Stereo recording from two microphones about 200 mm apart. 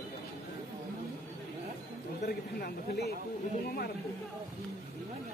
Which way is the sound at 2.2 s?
55° left (ahead or behind).